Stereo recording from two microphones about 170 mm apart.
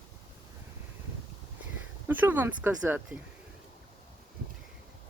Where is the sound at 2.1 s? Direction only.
10° right (ahead or behind).